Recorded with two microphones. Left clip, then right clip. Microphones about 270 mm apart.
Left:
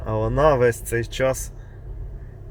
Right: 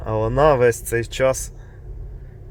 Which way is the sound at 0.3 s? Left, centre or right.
Centre.